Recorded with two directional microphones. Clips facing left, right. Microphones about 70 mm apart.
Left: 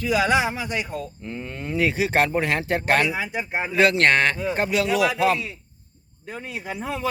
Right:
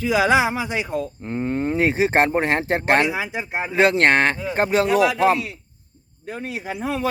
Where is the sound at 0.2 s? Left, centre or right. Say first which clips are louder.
Right 5 dB; centre.